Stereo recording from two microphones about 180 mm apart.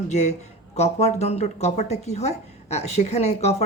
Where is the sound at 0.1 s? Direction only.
40° left (ahead or behind).